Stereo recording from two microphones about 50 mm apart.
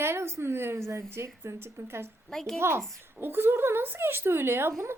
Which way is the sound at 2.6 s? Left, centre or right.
Right.